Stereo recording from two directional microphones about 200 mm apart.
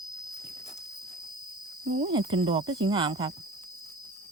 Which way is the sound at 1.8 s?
25° right (ahead or behind).